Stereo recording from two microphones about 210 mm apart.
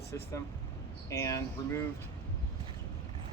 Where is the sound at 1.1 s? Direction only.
15° left (ahead or behind).